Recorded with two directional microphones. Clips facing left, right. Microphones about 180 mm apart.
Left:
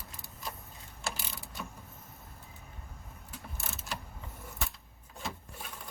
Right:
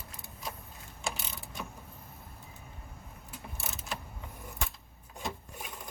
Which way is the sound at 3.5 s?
Centre (ahead or behind).